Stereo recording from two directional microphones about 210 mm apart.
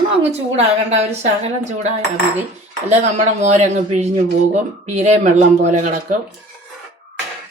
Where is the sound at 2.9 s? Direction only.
35° right (ahead or behind).